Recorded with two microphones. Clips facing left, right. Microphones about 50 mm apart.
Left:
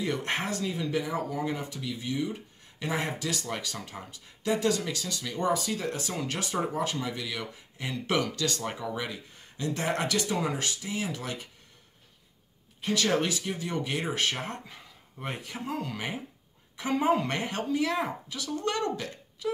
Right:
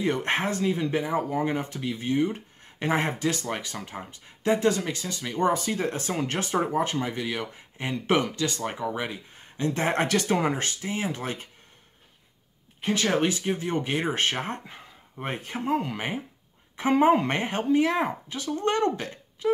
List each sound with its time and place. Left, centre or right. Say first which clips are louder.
0.0 s speech: right 5 dB; right
12.8 s speech: right 3 dB; right